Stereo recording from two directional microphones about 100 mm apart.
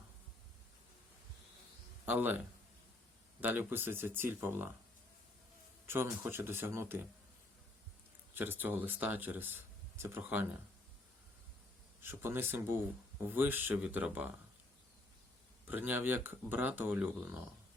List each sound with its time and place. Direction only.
2.0 s speech: 15° right (ahead or behind)
5.8 s speech: 25° right (ahead or behind)
8.4 s speech: 20° right (ahead or behind)
12.0 s speech: 20° right (ahead or behind)
15.6 s speech: 20° right (ahead or behind)